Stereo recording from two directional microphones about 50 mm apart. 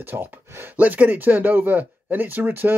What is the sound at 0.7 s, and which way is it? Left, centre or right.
Speech, right.